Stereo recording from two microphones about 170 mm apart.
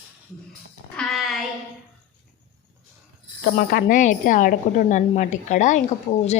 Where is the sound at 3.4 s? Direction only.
65° left (ahead or behind).